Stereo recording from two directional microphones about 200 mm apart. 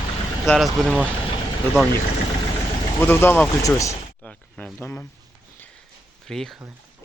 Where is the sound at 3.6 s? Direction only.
15° left (ahead or behind).